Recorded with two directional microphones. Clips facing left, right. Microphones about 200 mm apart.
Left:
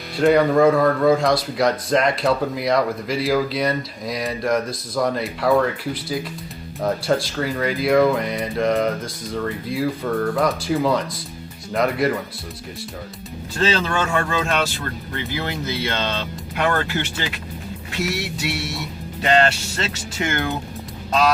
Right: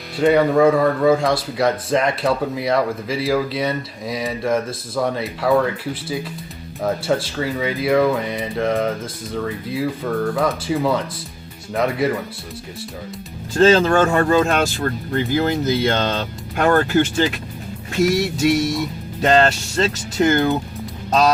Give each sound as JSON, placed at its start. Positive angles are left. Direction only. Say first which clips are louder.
{"t": 0.2, "sound": "speech", "louder": "right 1 dB", "side_deg": 0}
{"t": 7.1, "sound": "speech", "louder": "even", "side_deg": -5}
{"t": 13.6, "sound": "speech", "louder": "right 8 dB", "side_deg": -45}